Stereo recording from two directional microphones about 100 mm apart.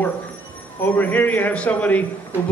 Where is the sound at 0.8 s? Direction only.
15° left (ahead or behind).